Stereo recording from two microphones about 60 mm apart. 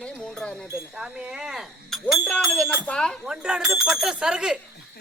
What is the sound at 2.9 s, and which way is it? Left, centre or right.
Speech, centre.